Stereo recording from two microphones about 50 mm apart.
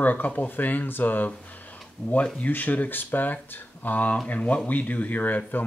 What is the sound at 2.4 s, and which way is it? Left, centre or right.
Speech, left.